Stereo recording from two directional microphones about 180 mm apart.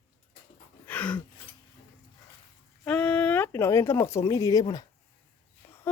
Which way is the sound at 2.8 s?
5° left (ahead or behind).